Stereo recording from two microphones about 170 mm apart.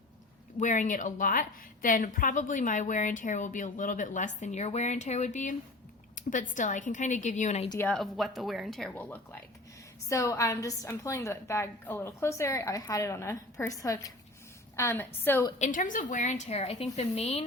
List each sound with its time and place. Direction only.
0.6 s a woman's voice: 45° left (ahead or behind)
7.8 s a woman's voice: 5° left (ahead or behind)
15.5 s a woman's voice: 45° left (ahead or behind)